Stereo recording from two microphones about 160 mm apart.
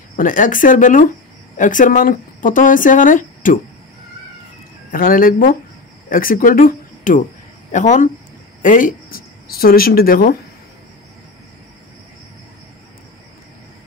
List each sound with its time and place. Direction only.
0.1 s speech: 55° left (ahead or behind)
4.9 s speech: 65° left (ahead or behind)